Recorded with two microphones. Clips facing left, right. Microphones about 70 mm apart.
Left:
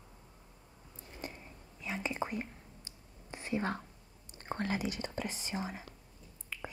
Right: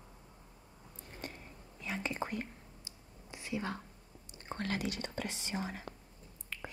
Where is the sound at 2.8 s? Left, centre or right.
Left.